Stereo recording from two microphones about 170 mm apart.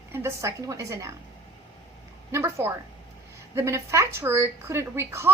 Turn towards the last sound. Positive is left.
turn(degrees=-15)  # may be behind; listen again after turning